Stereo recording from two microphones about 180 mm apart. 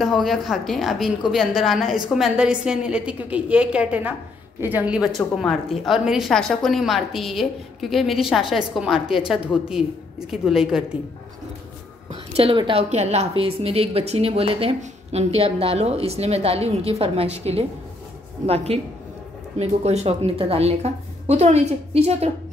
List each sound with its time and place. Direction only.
0.0 s a woman's voice: centre (ahead or behind)
12.1 s a woman's voice: 30° right (ahead or behind)